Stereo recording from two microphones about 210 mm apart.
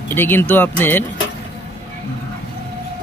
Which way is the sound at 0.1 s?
10° left (ahead or behind).